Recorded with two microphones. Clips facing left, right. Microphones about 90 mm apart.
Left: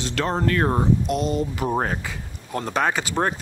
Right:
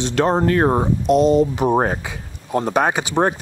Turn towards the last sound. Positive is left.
turn(degrees=-20)  # may be behind; listen again after turning